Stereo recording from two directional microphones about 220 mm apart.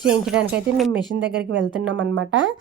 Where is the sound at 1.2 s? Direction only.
55° right (ahead or behind).